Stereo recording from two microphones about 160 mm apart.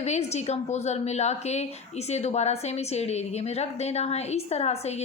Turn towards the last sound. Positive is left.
turn(degrees=40)  # may be behind; listen again after turning